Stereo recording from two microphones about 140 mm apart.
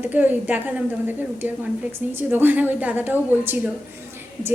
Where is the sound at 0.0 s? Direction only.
10° right (ahead or behind).